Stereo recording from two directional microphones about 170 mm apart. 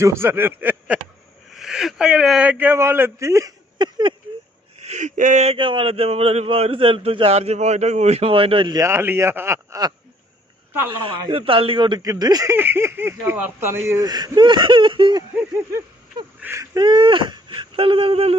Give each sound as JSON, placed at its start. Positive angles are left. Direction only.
{"t": 0.0, "sound": "speech", "side_deg": -15}
{"t": 4.8, "sound": "speech", "side_deg": -45}
{"t": 11.0, "sound": "speech", "side_deg": -30}
{"t": 16.4, "sound": "speech", "side_deg": -15}